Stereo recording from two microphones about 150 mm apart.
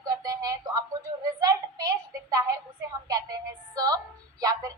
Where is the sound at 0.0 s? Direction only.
25° right (ahead or behind).